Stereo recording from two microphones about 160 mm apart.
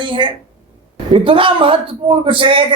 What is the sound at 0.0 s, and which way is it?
A woman's voice, 30° right (ahead or behind).